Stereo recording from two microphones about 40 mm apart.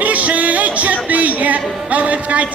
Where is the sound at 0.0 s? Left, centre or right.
Right.